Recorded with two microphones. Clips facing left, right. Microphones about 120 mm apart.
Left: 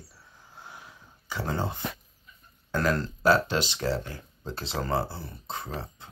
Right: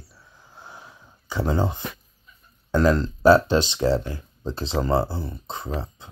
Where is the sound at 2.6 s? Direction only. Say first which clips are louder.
Right 7 dB; 20° right (ahead or behind).